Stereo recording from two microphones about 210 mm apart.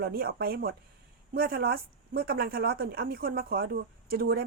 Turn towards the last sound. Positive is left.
turn(degrees=-45)  # may be behind; listen again after turning